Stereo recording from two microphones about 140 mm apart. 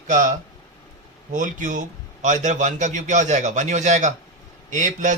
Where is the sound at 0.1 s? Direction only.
65° right (ahead or behind).